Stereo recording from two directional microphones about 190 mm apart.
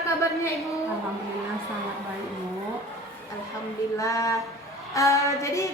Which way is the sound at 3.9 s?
15° left (ahead or behind).